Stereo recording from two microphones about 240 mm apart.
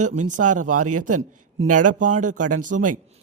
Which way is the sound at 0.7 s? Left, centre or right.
Right.